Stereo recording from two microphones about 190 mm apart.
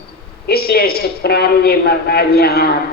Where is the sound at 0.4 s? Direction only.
55° left (ahead or behind).